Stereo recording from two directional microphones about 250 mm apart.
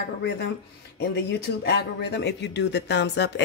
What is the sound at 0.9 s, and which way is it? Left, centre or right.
Speech, left.